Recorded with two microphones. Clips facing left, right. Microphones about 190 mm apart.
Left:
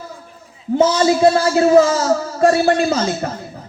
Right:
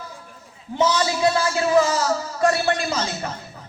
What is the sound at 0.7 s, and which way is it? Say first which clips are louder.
A man's voice: left 7 dB; 40° left (ahead or behind).